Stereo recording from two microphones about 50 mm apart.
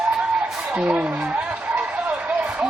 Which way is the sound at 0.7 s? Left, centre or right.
Right.